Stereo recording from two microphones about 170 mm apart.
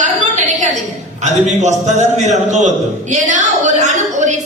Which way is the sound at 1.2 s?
45° right (ahead or behind).